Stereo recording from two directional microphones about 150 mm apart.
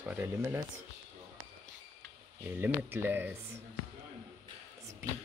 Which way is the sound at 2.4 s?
15° right (ahead or behind).